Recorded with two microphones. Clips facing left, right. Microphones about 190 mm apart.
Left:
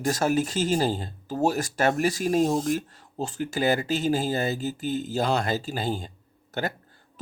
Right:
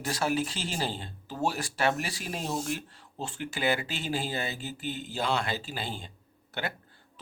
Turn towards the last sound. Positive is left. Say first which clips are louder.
# left 6 dB
turn(degrees=40)  # may be behind; listen again after turning